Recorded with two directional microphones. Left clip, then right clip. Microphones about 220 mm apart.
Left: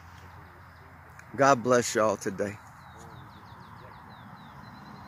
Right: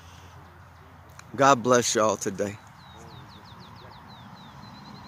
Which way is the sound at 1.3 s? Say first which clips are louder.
Right 3 dB; 5° right (ahead or behind).